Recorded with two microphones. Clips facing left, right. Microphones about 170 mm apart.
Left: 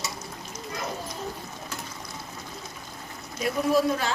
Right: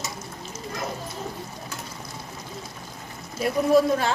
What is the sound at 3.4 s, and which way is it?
Speech, 55° right (ahead or behind).